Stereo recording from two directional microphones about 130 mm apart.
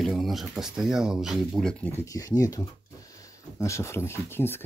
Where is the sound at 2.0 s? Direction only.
25° left (ahead or behind).